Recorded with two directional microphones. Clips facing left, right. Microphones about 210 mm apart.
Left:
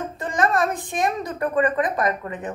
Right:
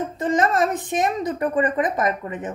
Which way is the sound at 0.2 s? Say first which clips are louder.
Right 2 dB; 20° right (ahead or behind).